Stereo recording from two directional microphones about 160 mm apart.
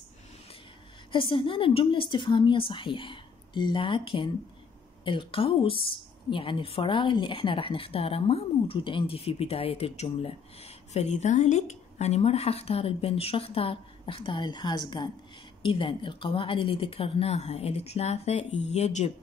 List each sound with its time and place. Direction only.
1.1 s speech: 30° left (ahead or behind)